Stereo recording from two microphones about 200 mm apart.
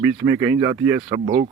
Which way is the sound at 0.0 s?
10° right (ahead or behind).